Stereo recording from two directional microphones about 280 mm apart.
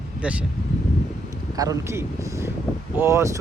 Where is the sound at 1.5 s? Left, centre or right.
Centre.